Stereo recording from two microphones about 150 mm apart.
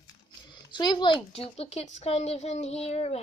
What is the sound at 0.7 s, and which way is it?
A child's voice, 30° left (ahead or behind).